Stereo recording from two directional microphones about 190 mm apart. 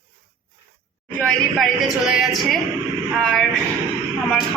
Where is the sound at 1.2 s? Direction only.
Centre (ahead or behind).